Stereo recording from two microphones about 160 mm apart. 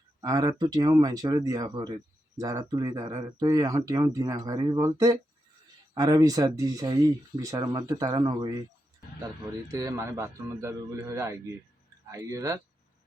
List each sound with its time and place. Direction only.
0.2 s speech: 25° right (ahead or behind)
9.7 s speech: 20° right (ahead or behind)